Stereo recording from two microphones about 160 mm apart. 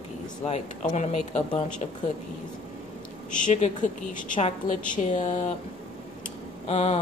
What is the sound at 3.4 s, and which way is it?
A woman's voice, 50° left (ahead or behind).